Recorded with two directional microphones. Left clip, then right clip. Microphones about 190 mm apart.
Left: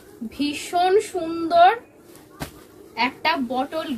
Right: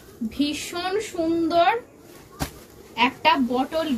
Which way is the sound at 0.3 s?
20° left (ahead or behind).